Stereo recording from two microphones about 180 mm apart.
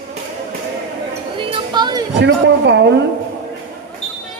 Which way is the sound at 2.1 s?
75° right (ahead or behind).